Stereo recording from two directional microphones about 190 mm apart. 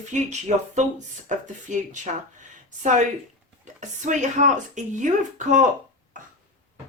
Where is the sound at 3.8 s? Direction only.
40° right (ahead or behind).